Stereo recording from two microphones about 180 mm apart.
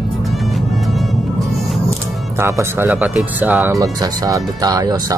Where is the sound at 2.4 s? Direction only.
15° right (ahead or behind).